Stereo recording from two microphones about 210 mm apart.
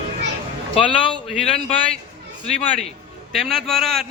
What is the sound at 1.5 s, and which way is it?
Speech, 25° left (ahead or behind).